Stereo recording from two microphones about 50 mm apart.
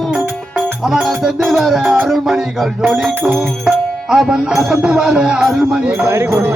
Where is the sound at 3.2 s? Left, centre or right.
Right.